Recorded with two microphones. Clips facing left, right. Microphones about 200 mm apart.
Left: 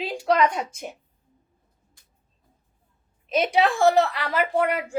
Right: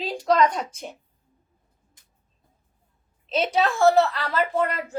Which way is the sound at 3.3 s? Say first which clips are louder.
Left 2 dB; 15° left (ahead or behind).